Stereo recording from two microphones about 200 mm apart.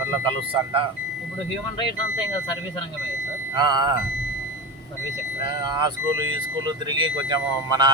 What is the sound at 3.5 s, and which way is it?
Speech, 20° right (ahead or behind).